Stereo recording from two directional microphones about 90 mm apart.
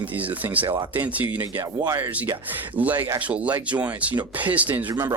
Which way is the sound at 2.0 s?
15° right (ahead or behind).